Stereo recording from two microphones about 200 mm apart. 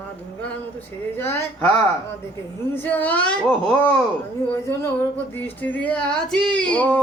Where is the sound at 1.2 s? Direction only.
10° left (ahead or behind).